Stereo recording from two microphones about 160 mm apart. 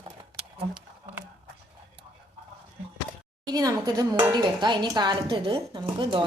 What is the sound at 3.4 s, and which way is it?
Speech, 25° right (ahead or behind).